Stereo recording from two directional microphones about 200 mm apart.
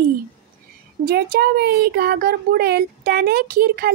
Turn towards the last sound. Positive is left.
turn(degrees=-50)  # may be behind; listen again after turning